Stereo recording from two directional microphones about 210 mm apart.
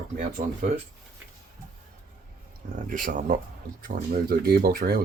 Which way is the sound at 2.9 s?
40° right (ahead or behind).